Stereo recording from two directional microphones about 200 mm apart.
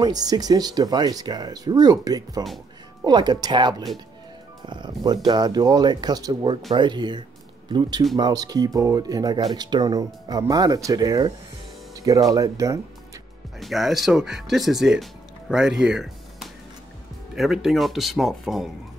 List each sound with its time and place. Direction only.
0.0 s speech: 20° right (ahead or behind)
13.6 s speech: centre (ahead or behind)